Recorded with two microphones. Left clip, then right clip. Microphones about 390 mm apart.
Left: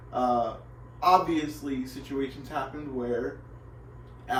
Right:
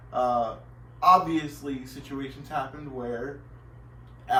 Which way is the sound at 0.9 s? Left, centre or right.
Centre.